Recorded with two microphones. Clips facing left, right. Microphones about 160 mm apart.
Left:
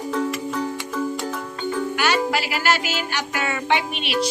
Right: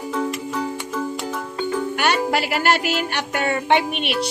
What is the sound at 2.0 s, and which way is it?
Music, 55° right (ahead or behind).